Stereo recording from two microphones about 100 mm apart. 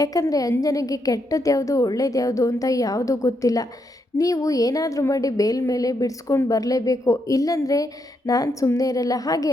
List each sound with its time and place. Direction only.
0.0 s a woman's voice: 35° left (ahead or behind)